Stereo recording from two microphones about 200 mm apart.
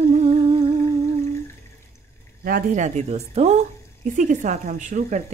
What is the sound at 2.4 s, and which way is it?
Speech, 45° right (ahead or behind).